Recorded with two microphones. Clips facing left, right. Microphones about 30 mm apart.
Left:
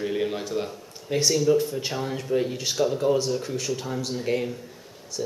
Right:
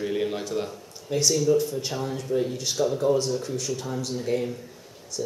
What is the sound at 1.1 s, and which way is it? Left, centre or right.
Speech, left.